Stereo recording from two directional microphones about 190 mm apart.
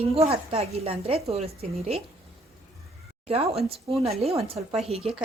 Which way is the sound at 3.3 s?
30° right (ahead or behind).